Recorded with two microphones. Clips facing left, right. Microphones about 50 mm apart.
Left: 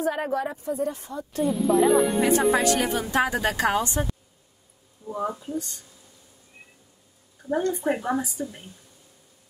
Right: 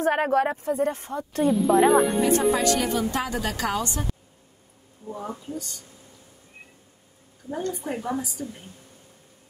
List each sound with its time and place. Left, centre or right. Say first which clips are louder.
0.0 s speech: right 4 dB; right
1.4 s speech: right 2 dB; centre
2.5 s speech: left 1 dB; left
5.4 s a woman's voice: left 3 dB; left
7.4 s a woman's voice: left 6 dB; left